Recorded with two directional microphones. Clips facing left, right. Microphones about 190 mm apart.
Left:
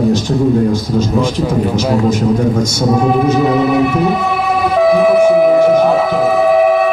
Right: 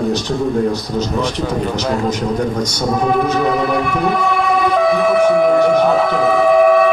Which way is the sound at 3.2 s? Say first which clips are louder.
Left 4 dB; 5° left (ahead or behind).